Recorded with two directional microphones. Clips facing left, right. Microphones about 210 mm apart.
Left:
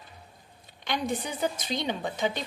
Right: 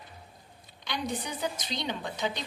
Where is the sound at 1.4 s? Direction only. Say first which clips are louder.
Left 6 dB; 50° left (ahead or behind).